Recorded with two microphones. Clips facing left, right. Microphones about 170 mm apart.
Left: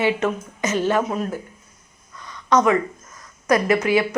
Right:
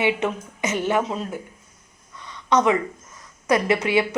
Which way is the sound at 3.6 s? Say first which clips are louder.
Left 2 dB; 25° right (ahead or behind).